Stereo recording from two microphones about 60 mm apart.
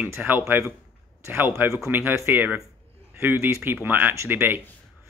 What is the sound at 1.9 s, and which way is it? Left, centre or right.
Speech, right.